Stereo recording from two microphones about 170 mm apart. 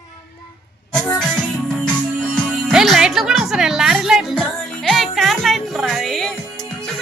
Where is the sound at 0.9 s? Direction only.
5° left (ahead or behind).